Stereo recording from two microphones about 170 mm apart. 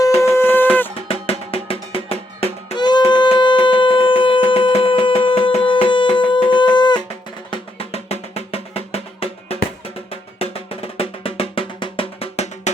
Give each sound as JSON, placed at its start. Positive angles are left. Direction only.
{"t": 0.2, "sound": "music", "side_deg": 15}
{"t": 1.0, "sound": "music", "side_deg": 35}